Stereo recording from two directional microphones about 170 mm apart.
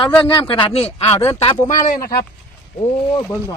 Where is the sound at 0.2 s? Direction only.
30° left (ahead or behind).